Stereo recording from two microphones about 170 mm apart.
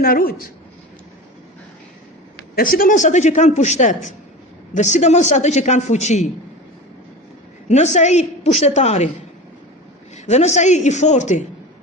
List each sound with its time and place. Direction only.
0.0 s a woman's voice: 60° left (ahead or behind)
2.6 s a man's voice: 55° left (ahead or behind)
7.7 s a woman's voice: 40° left (ahead or behind)
10.2 s a man's voice: 40° left (ahead or behind)